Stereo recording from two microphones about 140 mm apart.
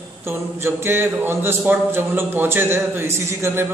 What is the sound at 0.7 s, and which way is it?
Speech, 15° right (ahead or behind).